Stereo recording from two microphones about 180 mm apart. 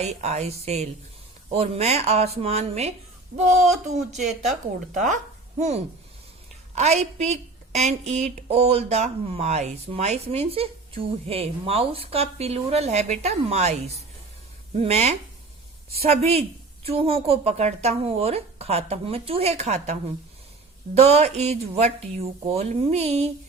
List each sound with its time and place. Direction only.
0.0 s a woman's voice: 35° right (ahead or behind)